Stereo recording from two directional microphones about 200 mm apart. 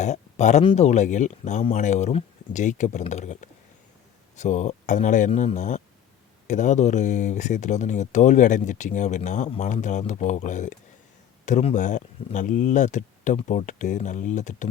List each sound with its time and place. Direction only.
0.0 s speech: 35° left (ahead or behind)